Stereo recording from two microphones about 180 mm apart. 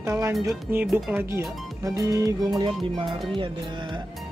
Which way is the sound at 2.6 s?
30° right (ahead or behind).